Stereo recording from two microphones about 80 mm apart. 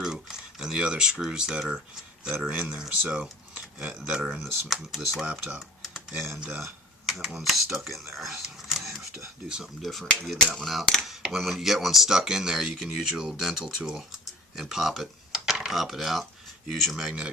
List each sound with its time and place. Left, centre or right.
0.0 s a sound: centre
2.5 s speech: centre
5.2 s speech: centre
5.8 s typing: centre
6.6 s speech: centre
8.1 s whispering: centre
9.5 s speech: centre